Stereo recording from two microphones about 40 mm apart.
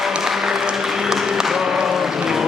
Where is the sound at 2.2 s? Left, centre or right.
Centre.